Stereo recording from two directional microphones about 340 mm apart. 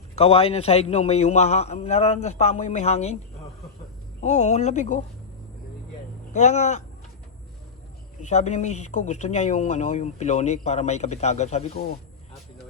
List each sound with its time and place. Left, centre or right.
0.2 s speech: centre
4.2 s speech: centre
6.3 s speech: centre
8.2 s speech: centre